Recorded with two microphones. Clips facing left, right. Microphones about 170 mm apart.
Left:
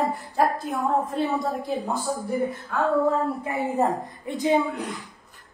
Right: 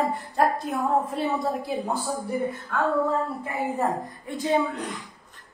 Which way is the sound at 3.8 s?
20° left (ahead or behind).